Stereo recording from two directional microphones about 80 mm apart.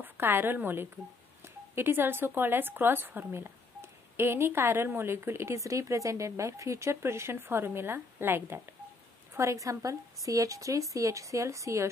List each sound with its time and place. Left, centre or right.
0.0 s a woman's voice: right